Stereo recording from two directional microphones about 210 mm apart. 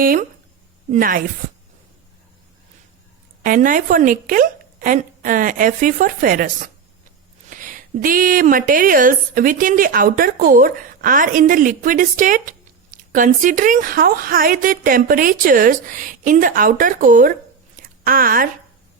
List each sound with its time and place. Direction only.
0.0 s a woman's voice: 45° right (ahead or behind)
3.4 s a woman's voice: 40° right (ahead or behind)
17.7 s a sound: 40° right (ahead or behind)